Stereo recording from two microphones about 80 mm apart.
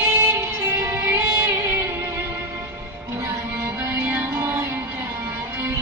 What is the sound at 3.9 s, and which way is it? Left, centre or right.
Music, right.